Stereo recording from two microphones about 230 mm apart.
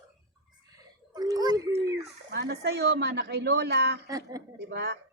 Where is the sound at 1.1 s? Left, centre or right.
Centre.